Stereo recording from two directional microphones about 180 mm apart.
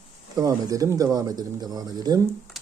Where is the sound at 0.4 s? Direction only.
20° right (ahead or behind).